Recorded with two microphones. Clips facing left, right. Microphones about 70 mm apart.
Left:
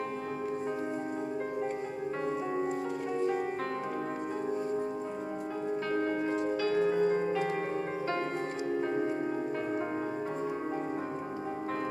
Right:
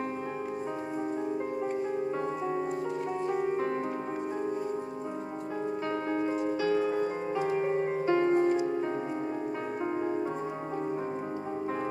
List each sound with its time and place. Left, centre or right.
6.0 s music: centre